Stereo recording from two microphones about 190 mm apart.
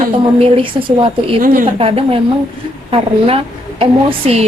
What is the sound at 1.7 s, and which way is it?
Speech, 30° right (ahead or behind).